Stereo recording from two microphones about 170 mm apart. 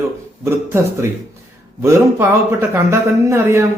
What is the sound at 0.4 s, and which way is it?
Speech, 15° right (ahead or behind).